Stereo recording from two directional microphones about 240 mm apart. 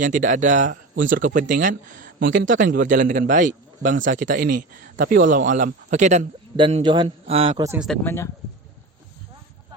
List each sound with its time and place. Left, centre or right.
0.0 s a man's voice: right
7.7 s speech: centre
8.0 s speech: centre